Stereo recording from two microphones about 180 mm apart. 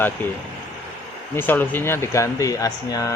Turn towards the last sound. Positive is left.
turn(degrees=20)  # may be behind; listen again after turning